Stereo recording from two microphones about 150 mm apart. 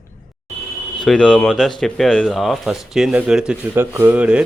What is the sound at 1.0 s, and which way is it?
Speech, 5° left (ahead or behind).